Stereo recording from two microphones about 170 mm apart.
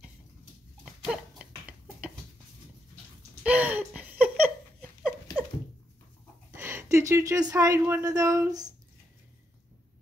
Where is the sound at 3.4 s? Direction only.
10° right (ahead or behind).